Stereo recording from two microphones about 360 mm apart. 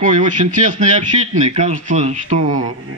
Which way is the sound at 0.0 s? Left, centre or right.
Right.